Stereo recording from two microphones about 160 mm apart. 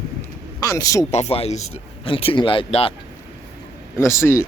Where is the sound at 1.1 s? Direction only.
40° left (ahead or behind).